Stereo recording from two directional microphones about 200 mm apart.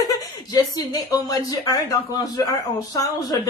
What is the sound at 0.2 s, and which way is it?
A woman's voice, 20° left (ahead or behind).